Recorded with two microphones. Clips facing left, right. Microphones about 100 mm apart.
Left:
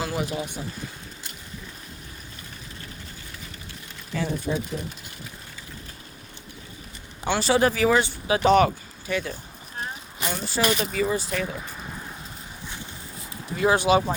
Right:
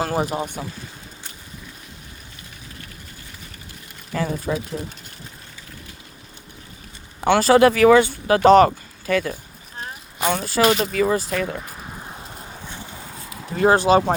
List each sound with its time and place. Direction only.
0.0 s speech: 45° right (ahead or behind)
4.1 s speech: 50° right (ahead or behind)
7.2 s speech: 55° right (ahead or behind); by 8.0 s 75° right (ahead or behind)
8.0 s speech: 55° right (ahead or behind)
10.2 s speech: 70° right (ahead or behind)
11.3 s speech: 55° right (ahead or behind)
13.6 s speech: 40° right (ahead or behind)